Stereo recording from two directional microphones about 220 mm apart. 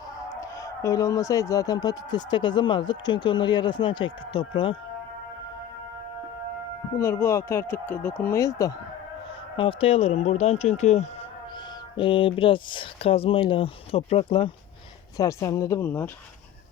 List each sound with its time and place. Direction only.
0.3 s speech: 15° left (ahead or behind)
6.9 s speech: 15° left (ahead or behind)
15.2 s speech: 15° left (ahead or behind)